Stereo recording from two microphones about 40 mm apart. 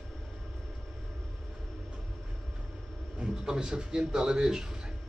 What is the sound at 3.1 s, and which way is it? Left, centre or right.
A man's voice, centre.